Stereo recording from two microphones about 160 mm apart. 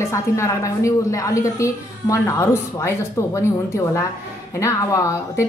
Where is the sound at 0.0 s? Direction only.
20° left (ahead or behind).